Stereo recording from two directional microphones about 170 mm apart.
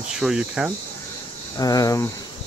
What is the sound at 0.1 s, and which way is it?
Speech, 5° right (ahead or behind).